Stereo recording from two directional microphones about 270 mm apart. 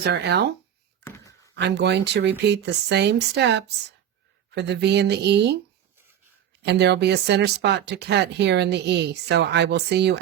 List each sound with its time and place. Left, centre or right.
0.0 s speech: right
1.5 s speech: right
6.6 s speech: right